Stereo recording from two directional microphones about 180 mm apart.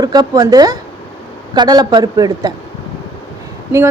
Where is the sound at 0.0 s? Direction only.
20° right (ahead or behind).